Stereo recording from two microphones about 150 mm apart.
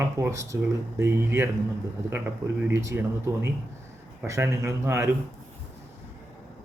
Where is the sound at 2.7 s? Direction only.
20° right (ahead or behind).